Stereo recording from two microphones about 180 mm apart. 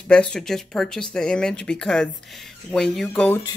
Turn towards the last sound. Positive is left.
turn(degrees=5)  # may be behind; listen again after turning